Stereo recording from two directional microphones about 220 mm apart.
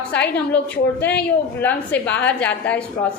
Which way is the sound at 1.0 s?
5° left (ahead or behind).